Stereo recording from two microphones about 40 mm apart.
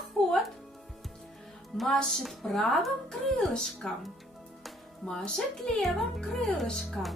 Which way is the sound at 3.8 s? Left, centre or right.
Centre.